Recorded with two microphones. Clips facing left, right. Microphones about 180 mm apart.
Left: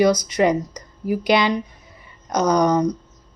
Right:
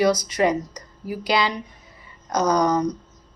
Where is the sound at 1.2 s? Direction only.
20° left (ahead or behind).